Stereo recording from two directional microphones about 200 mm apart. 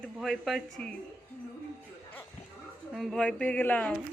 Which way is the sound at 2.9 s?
Centre (ahead or behind).